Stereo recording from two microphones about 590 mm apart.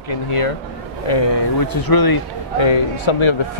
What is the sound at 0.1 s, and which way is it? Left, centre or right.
Speech, left.